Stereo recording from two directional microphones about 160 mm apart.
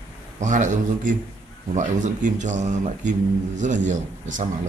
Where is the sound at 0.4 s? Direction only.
50° right (ahead or behind).